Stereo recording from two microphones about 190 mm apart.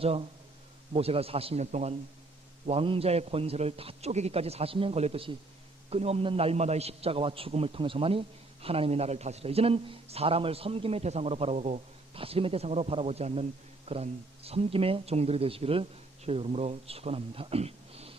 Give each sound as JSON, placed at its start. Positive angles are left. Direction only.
{"t": 0.0, "sound": "a man's voice", "side_deg": -30}